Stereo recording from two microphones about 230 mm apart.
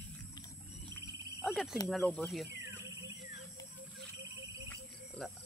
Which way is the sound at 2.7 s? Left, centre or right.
Centre.